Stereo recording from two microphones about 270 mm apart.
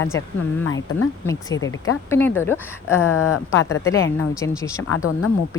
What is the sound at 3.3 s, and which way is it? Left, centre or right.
Speech, left.